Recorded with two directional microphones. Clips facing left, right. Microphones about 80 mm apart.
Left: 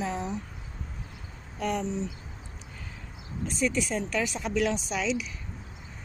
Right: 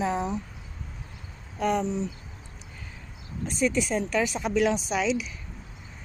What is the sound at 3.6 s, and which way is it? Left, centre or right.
Speech, right.